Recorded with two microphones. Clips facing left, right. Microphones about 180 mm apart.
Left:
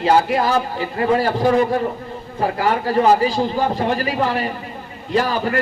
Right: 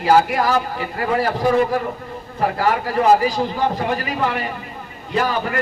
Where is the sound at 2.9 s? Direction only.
30° left (ahead or behind).